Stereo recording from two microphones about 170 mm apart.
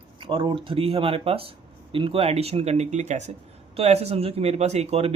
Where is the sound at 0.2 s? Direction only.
30° right (ahead or behind).